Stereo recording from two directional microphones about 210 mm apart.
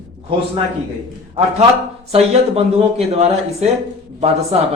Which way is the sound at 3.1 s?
30° right (ahead or behind).